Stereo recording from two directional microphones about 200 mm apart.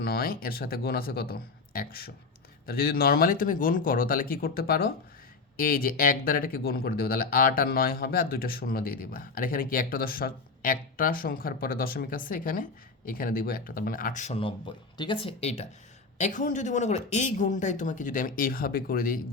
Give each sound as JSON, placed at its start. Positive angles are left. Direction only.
{"t": 0.0, "sound": "speech", "side_deg": 50}